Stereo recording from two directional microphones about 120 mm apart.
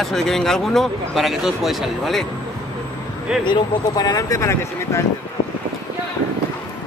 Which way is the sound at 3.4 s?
35° left (ahead or behind).